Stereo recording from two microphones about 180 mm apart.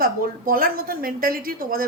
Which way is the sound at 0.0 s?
55° right (ahead or behind).